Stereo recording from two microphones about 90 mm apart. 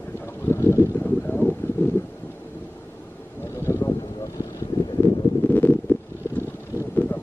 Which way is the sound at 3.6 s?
25° left (ahead or behind).